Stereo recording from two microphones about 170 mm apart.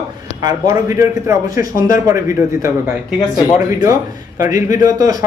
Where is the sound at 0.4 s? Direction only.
20° right (ahead or behind).